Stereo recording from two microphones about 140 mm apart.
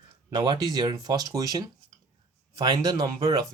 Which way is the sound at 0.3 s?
30° right (ahead or behind).